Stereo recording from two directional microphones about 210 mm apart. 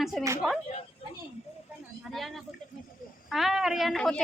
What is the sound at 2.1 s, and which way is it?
Speech, centre (ahead or behind).